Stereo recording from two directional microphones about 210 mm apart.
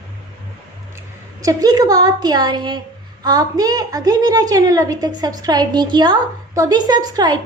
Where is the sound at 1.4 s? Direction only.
15° right (ahead or behind).